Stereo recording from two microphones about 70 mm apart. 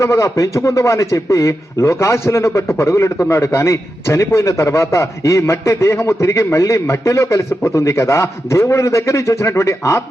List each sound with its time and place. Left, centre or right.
0.0 s a man's voice: left